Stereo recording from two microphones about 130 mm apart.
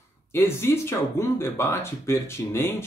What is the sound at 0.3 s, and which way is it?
Speech, 20° left (ahead or behind).